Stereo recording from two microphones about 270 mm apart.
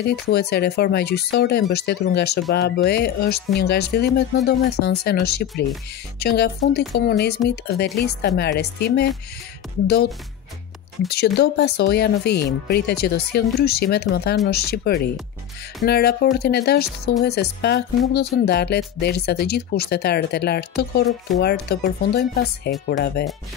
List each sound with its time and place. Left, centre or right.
0.0 s speech: left
11.1 s speech: left